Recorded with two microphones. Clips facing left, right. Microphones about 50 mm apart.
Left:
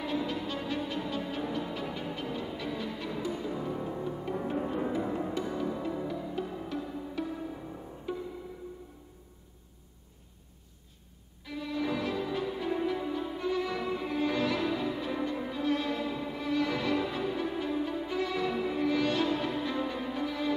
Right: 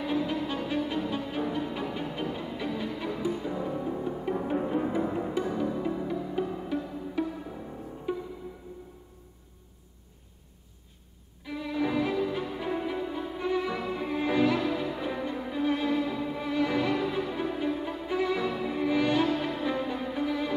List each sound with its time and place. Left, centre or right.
0.7 s music: centre
3.7 s music: centre
11.4 s violin: centre
13.4 s music: centre